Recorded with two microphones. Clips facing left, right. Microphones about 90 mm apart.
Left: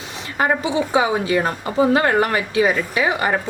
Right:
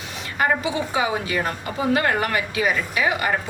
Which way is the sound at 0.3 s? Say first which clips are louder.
Left 3 dB; 30° left (ahead or behind).